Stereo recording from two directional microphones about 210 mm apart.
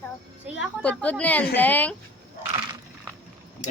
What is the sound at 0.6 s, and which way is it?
A woman's voice, 5° left (ahead or behind).